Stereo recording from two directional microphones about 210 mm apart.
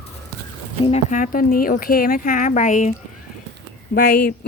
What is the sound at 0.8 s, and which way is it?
Speech, 35° left (ahead or behind).